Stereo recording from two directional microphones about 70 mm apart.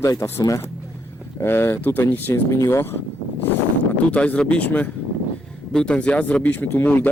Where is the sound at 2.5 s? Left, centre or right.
Left.